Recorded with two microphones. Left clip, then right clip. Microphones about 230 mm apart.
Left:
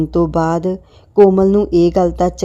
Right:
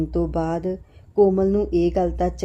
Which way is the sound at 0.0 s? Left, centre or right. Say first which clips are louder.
Left 8 dB; left.